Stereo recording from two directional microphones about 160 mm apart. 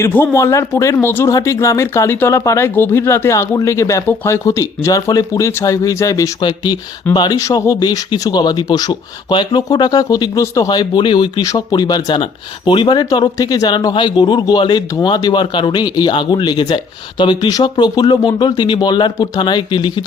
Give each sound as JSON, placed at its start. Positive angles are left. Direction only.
{"t": 0.0, "sound": "speech", "side_deg": 10}